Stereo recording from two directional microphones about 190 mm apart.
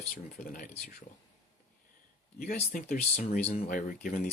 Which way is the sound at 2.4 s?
50° left (ahead or behind).